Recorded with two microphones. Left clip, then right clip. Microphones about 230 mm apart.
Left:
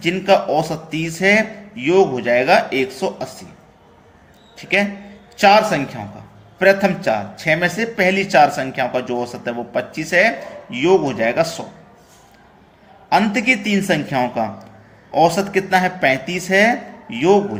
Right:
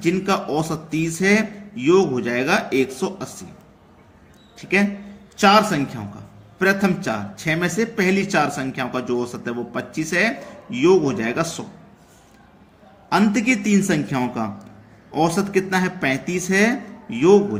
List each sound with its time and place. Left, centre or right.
0.0 s a man's voice: right
4.5 s a man's voice: centre
13.1 s a man's voice: right